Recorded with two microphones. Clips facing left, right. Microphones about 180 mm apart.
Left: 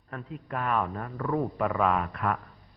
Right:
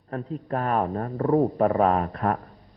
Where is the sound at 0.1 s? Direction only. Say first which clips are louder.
Right 7 dB; 35° right (ahead or behind).